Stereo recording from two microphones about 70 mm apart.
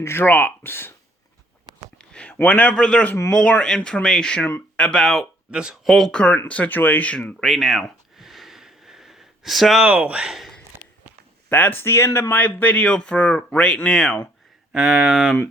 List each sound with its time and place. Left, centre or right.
0.0 s speech: left
2.0 s a sound: centre
2.3 s speech: left
2.7 s speech: centre
5.5 s speech: centre
6.1 s speech: centre
7.4 s a sound: centre
9.8 s speech: centre
11.4 s speech: left
12.3 s speech: left; by 14.2 s centre
14.7 s speech: centre